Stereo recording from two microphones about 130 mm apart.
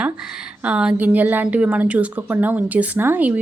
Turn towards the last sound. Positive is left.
turn(degrees=-10)  # may be behind; listen again after turning